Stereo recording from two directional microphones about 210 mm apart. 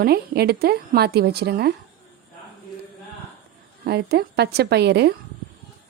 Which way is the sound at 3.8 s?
50° right (ahead or behind).